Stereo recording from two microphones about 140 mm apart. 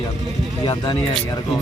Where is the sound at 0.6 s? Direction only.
30° left (ahead or behind).